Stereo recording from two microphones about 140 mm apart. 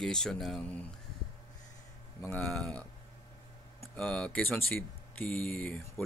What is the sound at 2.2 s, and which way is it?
Speech, 10° left (ahead or behind).